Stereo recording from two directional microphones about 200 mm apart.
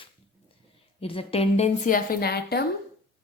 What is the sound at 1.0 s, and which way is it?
A woman's voice, 30° left (ahead or behind).